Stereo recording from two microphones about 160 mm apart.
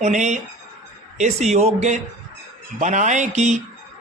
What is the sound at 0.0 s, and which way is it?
A man's voice, 45° right (ahead or behind).